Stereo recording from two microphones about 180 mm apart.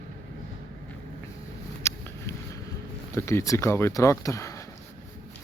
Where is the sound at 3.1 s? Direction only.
15° left (ahead or behind).